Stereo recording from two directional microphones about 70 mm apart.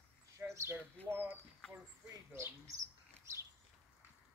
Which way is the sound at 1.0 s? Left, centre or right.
Right.